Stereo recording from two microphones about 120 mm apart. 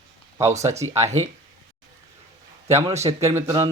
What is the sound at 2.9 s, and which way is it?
Speech, 65° right (ahead or behind).